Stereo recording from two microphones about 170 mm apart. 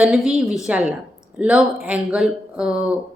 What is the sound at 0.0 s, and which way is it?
A woman's voice, 5° right (ahead or behind).